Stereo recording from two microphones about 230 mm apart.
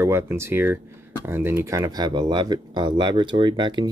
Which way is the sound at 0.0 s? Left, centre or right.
Centre.